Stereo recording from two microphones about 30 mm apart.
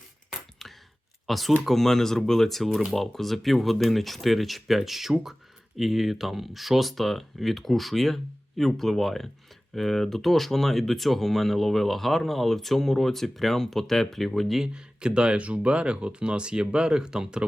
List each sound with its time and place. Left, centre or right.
0.6 s a sound: centre
1.3 s speech: centre
14.7 s speech: right
15.4 s speech: right